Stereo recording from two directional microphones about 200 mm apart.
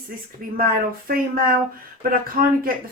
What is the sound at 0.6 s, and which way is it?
Speech, 45° right (ahead or behind).